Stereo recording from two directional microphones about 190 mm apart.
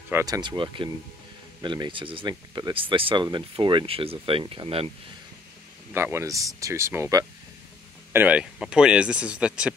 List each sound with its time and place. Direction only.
0.1 s speech: 20° right (ahead or behind)
5.9 s speech: 10° right (ahead or behind)